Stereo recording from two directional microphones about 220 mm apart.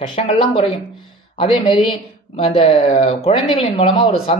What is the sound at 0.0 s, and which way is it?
Speech, 25° left (ahead or behind).